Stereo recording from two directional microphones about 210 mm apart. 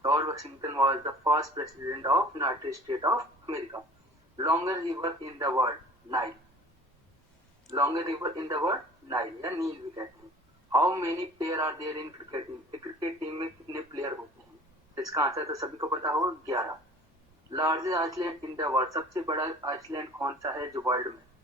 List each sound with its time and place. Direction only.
0.0 s speech: 15° right (ahead or behind)
7.7 s speech: 15° right (ahead or behind)